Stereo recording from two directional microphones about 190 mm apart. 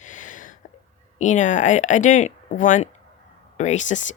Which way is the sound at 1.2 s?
40° left (ahead or behind).